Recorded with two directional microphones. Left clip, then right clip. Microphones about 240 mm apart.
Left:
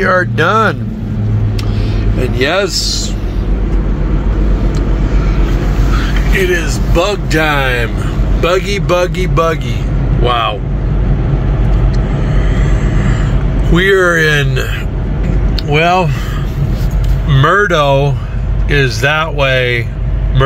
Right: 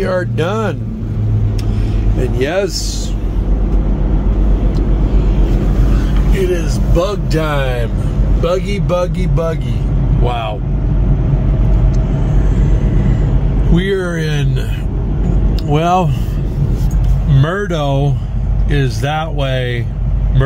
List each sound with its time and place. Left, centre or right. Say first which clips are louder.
0.0 s speech: left 6 dB; centre
2.1 s speech: left 3 dB; centre
6.5 s speech: left 3 dB; centre
10.2 s speech: left 7 dB; centre
13.7 s speech: left 9 dB; centre
15.7 s speech: left 3 dB; centre
17.3 s speech: left 8 dB; centre